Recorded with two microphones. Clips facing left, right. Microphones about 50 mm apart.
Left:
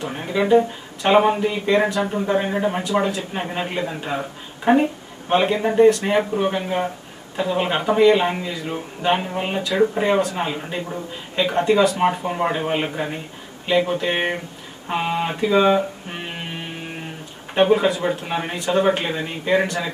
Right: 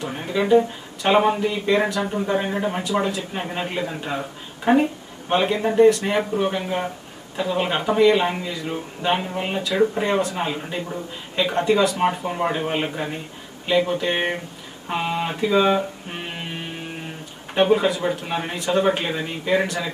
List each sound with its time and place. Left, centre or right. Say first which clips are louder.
0.0 s speech: left 1 dB; centre
14.9 s music: left 2 dB; centre
17.6 s speech: left 1 dB; centre